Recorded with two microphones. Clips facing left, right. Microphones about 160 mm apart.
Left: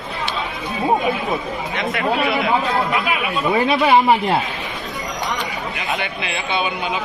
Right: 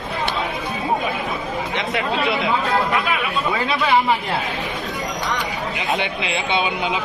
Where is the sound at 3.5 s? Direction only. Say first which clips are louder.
Left 6 dB; 20° left (ahead or behind).